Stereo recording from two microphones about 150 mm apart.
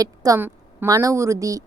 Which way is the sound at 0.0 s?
25° right (ahead or behind).